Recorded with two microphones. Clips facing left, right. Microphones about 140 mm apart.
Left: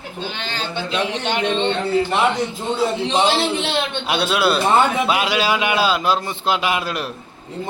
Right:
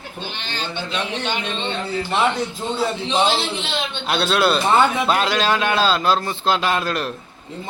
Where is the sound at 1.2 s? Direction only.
75° left (ahead or behind).